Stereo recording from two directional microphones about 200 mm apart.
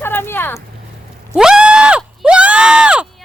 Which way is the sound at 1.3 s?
5° right (ahead or behind).